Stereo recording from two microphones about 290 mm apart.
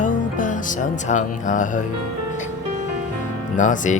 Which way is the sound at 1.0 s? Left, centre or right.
Left.